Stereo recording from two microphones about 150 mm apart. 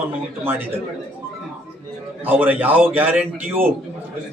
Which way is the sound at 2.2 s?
15° right (ahead or behind).